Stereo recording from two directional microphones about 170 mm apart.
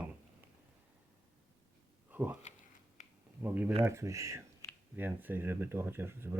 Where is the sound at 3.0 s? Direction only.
45° left (ahead or behind).